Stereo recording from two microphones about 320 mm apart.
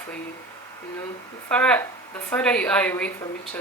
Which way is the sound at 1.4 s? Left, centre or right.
Centre.